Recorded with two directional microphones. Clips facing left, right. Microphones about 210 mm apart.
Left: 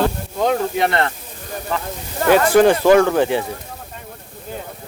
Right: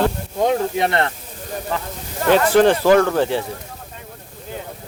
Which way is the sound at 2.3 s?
10° left (ahead or behind).